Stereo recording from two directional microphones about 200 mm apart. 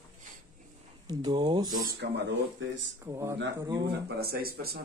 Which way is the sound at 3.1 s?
15° right (ahead or behind).